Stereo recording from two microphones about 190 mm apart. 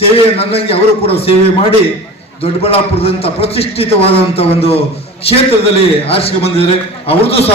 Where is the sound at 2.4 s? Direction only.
30° left (ahead or behind).